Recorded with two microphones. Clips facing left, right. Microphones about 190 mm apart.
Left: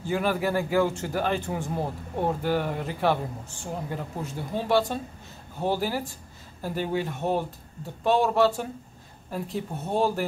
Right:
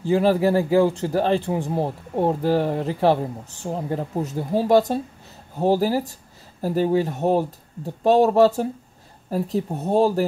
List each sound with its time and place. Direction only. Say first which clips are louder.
0.0 s a man's voice: right 8 dB; 35° right (ahead or behind)